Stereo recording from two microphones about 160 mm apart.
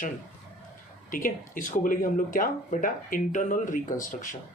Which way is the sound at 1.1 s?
60° left (ahead or behind).